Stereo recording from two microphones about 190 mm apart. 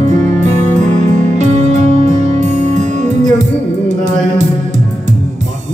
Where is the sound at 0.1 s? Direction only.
35° right (ahead or behind).